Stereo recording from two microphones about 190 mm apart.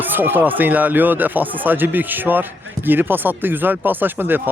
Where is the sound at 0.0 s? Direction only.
10° right (ahead or behind).